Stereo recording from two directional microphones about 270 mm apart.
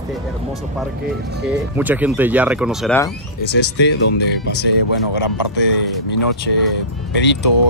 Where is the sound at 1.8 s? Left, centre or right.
Centre.